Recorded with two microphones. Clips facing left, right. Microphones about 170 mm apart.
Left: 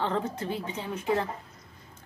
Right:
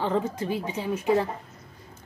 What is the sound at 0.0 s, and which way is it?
Speech, 10° right (ahead or behind).